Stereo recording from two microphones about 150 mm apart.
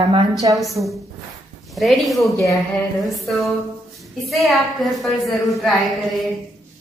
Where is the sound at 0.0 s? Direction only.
35° right (ahead or behind).